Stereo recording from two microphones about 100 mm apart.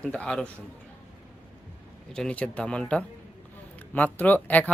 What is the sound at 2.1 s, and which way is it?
Speech, 10° left (ahead or behind).